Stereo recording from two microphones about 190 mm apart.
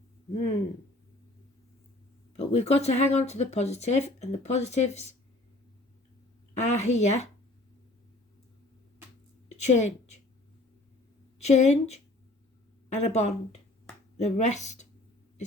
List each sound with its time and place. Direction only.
2.3 s speech: 35° left (ahead or behind)
6.6 s a woman's voice: 35° left (ahead or behind)
9.6 s a woman's voice: 35° left (ahead or behind)
11.3 s a woman's voice: 35° left (ahead or behind)